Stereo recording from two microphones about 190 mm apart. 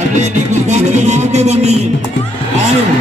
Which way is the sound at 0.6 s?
35° right (ahead or behind).